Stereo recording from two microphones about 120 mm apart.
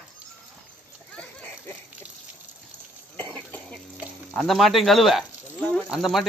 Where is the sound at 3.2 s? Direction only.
15° left (ahead or behind).